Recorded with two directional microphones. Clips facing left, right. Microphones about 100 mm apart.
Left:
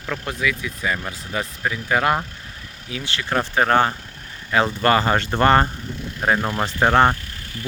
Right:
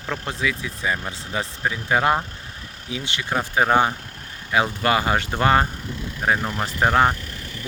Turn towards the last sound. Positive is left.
turn(degrees=0)  # may be behind; listen again after turning